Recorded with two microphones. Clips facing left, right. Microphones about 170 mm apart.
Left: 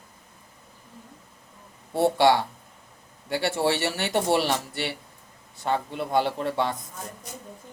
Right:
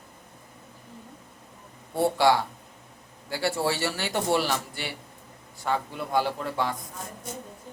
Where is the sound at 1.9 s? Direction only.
20° left (ahead or behind).